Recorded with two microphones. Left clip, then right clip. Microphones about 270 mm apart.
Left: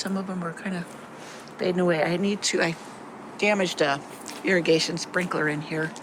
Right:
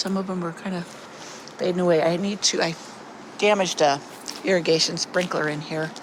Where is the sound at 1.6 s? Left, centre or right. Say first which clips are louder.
Right 3 dB; centre.